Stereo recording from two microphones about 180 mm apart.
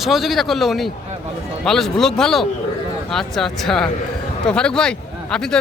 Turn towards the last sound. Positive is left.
turn(degrees=5)  # may be behind; listen again after turning